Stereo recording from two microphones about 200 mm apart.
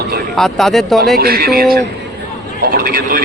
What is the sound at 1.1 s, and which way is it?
A man's voice, 50° right (ahead or behind).